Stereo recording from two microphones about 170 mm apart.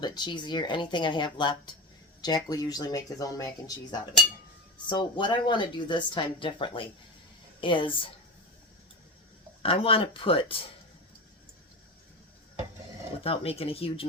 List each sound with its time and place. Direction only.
0.0 s speech: 25° left (ahead or behind)
4.9 s speech: 25° left (ahead or behind)
9.6 s speech: 35° left (ahead or behind)
13.2 s speech: 35° left (ahead or behind)